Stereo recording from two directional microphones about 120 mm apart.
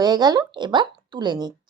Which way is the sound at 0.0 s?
35° right (ahead or behind).